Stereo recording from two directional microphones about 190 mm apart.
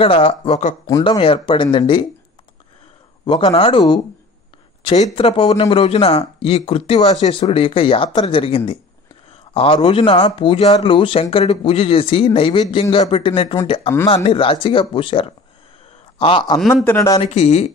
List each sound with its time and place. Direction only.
0.0 s speech: 30° left (ahead or behind)
0.8 s speech: 20° left (ahead or behind)
3.3 s speech: 30° left (ahead or behind)
16.6 s speech: 10° left (ahead or behind)
17.2 s speech: 35° left (ahead or behind)